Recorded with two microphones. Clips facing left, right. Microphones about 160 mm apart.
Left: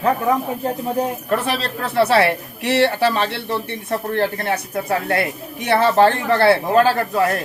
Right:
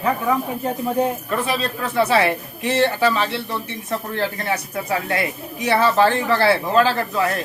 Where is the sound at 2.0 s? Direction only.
70° left (ahead or behind).